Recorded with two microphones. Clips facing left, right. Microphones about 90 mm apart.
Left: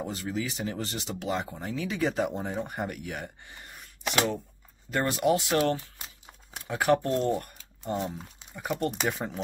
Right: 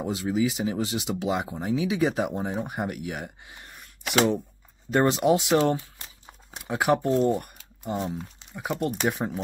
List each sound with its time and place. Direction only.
0.0 s speech: 15° right (ahead or behind)
4.9 s speech: 20° right (ahead or behind)
6.7 s speech: 10° right (ahead or behind)